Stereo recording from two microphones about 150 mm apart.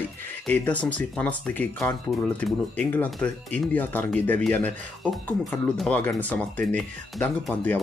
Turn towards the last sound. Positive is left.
turn(degrees=5)  # may be behind; listen again after turning